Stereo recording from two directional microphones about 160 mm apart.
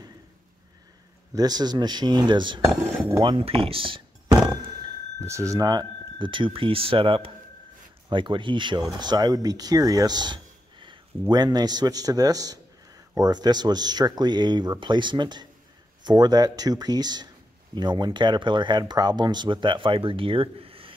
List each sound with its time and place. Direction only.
1.3 s speech: 25° right (ahead or behind)
5.2 s speech: 20° right (ahead or behind); by 20.9 s 35° right (ahead or behind)